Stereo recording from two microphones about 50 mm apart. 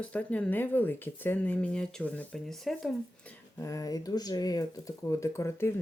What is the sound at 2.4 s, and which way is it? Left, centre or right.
Speech, centre.